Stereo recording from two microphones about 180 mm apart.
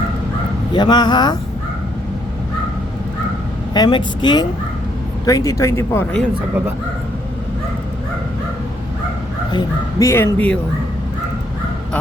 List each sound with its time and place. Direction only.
0.7 s speech: 25° left (ahead or behind)
3.8 s speech: 25° left (ahead or behind); by 6.2 s 10° left (ahead or behind)
9.5 s speech: 20° left (ahead or behind)